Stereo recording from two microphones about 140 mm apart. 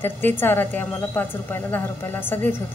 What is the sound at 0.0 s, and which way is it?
A woman's voice, 15° left (ahead or behind).